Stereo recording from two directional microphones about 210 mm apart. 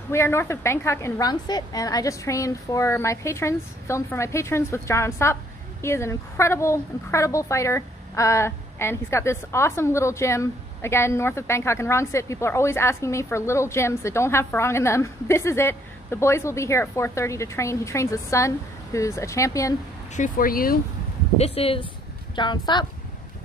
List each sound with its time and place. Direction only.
0.1 s a woman's voice: 10° left (ahead or behind)
20.2 s speech: 40° left (ahead or behind)
21.4 s speech: 25° left (ahead or behind)